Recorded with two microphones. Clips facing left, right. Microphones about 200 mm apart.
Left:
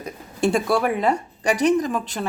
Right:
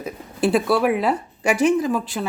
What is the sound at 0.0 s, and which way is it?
A woman's voice, 5° right (ahead or behind).